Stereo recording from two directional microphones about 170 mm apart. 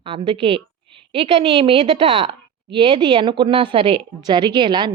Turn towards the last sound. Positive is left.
turn(degrees=-25)  # may be behind; listen again after turning